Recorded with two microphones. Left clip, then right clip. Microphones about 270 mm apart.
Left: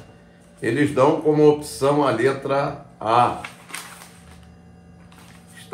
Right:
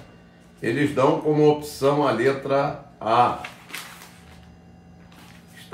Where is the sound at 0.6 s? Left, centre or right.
Centre.